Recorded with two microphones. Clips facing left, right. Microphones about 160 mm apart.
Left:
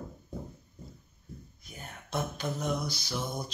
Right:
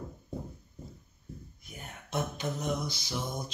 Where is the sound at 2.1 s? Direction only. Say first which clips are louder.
Even; 20° right (ahead or behind).